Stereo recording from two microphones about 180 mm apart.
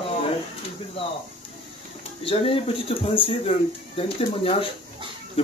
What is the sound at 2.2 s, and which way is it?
Speech, 30° left (ahead or behind).